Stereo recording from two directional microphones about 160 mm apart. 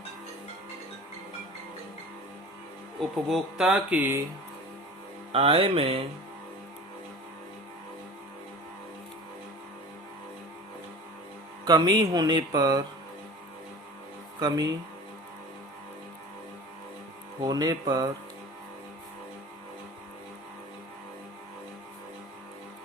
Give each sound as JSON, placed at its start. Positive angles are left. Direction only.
{"t": 3.2, "sound": "speech", "side_deg": -5}
{"t": 5.3, "sound": "speech", "side_deg": -35}
{"t": 11.6, "sound": "music", "side_deg": -25}
{"t": 14.3, "sound": "music", "side_deg": -25}
{"t": 17.4, "sound": "music", "side_deg": -25}